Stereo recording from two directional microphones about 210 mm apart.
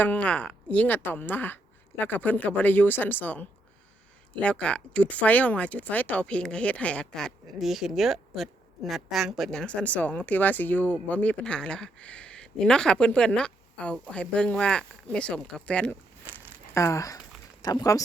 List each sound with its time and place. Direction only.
0.0 s a woman's voice: 5° left (ahead or behind)